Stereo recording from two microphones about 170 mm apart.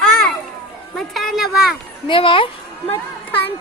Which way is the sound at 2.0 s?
30° left (ahead or behind).